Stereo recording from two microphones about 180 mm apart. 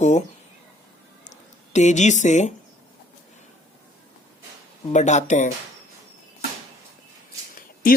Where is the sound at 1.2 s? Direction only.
40° left (ahead or behind).